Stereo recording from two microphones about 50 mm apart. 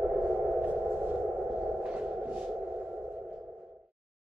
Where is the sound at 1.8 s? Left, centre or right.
Right.